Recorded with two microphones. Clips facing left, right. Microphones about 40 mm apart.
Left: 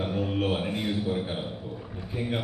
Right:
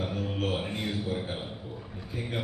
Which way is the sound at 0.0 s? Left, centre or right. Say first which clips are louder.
Left 4 dB; left.